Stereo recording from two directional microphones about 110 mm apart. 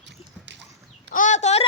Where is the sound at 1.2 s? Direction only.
90° left.